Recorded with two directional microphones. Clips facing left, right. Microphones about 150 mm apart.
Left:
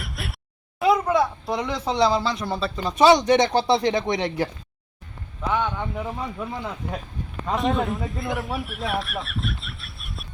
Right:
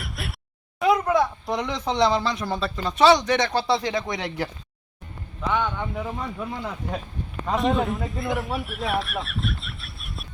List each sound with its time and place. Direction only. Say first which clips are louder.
0.0 s a sound: even; centre (ahead or behind)
0.8 s speech: left 1 dB; centre (ahead or behind); by 4.4 s 25° left (ahead or behind)
5.4 s speech: even; 5° left (ahead or behind)